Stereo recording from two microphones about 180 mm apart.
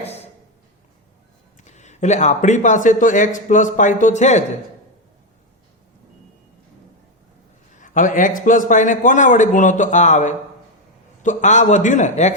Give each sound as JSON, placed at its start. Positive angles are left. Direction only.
{"t": 1.6, "sound": "a man's voice", "side_deg": 40}
{"t": 7.8, "sound": "a man's voice", "side_deg": 45}